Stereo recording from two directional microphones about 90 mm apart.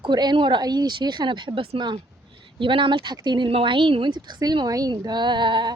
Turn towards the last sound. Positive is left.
turn(degrees=-60)  # may be behind; listen again after turning